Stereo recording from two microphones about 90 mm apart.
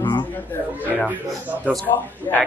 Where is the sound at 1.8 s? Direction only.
20° left (ahead or behind).